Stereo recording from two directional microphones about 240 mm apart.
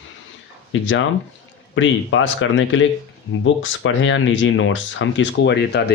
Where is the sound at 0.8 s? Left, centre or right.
Left.